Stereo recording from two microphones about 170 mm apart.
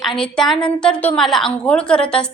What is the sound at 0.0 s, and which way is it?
A woman's voice, centre (ahead or behind).